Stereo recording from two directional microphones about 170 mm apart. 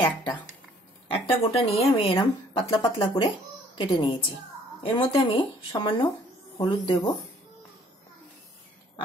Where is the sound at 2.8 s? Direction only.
25° left (ahead or behind).